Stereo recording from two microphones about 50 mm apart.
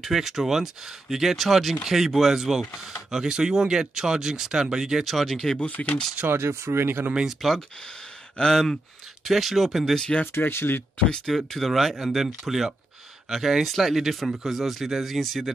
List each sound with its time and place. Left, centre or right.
0.0 s speech: centre
5.0 s speech: centre
5.6 s speech: left
6.4 s speech: right
7.4 s speech: centre
8.4 s speech: centre
9.2 s speech: centre
10.2 s speech: left
11.2 s speech: centre